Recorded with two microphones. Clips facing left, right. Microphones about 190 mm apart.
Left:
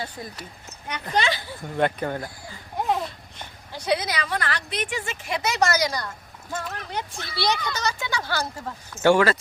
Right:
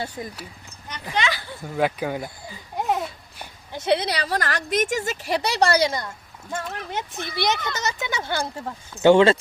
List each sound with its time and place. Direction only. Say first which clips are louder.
1.1 s speech: left 1 dB; 35° left (ahead or behind)
1.6 s babbling: right 1 dB; 5° right (ahead or behind)
3.7 s a woman's voice: right 3 dB; 25° right (ahead or behind)
6.5 s speech: right 2 dB; 5° right (ahead or behind)
6.9 s speech: right 3 dB; 20° right (ahead or behind)